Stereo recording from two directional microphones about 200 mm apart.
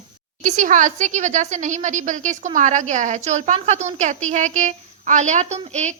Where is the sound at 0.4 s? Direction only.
40° right (ahead or behind).